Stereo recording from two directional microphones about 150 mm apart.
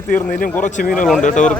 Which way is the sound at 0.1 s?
65° left (ahead or behind).